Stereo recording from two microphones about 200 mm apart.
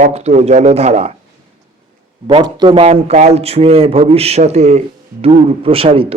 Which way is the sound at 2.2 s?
25° right (ahead or behind).